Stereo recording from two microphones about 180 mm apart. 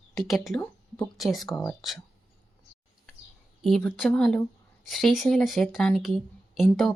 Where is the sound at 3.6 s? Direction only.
Centre (ahead or behind).